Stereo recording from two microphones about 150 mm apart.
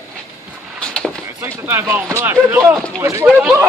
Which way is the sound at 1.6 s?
15° right (ahead or behind).